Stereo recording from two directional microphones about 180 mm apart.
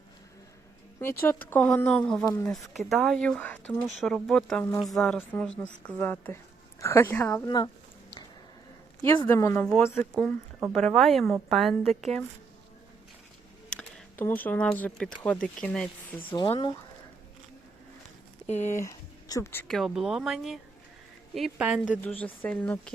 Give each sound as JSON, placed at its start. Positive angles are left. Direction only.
{"t": 1.2, "sound": "a woman's voice", "side_deg": 10}
{"t": 2.2, "sound": "a woman's voice", "side_deg": 15}
{"t": 2.5, "sound": "a woman's voice", "side_deg": 0}
{"t": 7.4, "sound": "speech", "side_deg": 25}
{"t": 9.2, "sound": "a woman's voice", "side_deg": 15}
{"t": 13.7, "sound": "a woman's voice", "side_deg": 10}
{"t": 16.3, "sound": "speech", "side_deg": 25}
{"t": 18.6, "sound": "speech", "side_deg": 15}
{"t": 19.6, "sound": "speech", "side_deg": 0}
{"t": 22.0, "sound": "a woman's voice", "side_deg": 10}